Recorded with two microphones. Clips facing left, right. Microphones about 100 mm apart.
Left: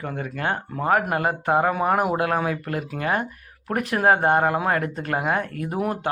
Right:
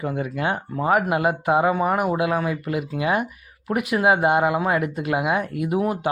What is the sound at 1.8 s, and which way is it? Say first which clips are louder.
Speech: even; centre (ahead or behind).